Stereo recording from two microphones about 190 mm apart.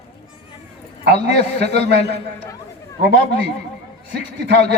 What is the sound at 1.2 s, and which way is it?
Speech, 60° right (ahead or behind).